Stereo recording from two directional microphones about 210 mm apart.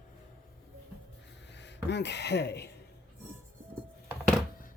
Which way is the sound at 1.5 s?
55° left (ahead or behind).